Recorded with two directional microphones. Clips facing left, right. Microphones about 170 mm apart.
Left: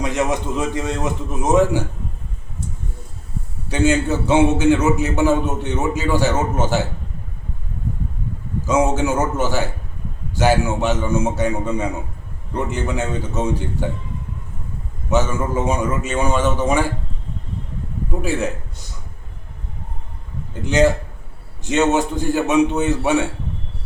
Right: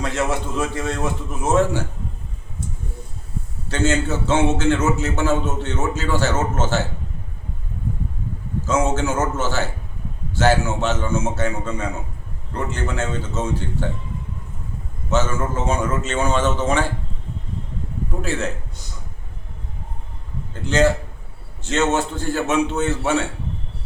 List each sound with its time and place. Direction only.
0.0 s a man's voice: 15° left (ahead or behind)
3.7 s a man's voice: 15° left (ahead or behind)
8.6 s a man's voice: 15° left (ahead or behind)
15.1 s a man's voice: 15° left (ahead or behind)
18.2 s a man's voice: 10° left (ahead or behind)
20.5 s a man's voice: 15° left (ahead or behind)